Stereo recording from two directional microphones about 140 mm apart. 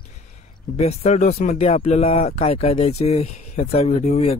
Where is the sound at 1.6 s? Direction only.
45° left (ahead or behind).